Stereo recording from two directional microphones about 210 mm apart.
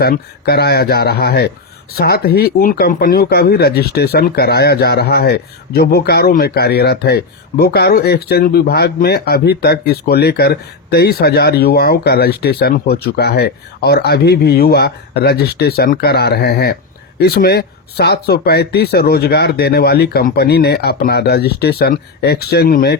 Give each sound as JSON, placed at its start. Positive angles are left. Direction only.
{"t": 0.0, "sound": "speech", "side_deg": 50}